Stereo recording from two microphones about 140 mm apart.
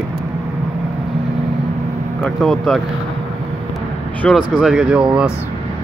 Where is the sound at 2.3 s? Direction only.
5° left (ahead or behind).